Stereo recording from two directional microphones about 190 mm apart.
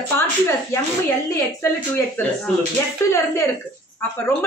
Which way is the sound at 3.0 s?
15° left (ahead or behind).